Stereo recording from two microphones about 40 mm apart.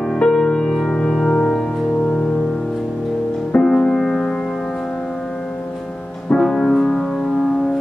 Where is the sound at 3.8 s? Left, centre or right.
Centre.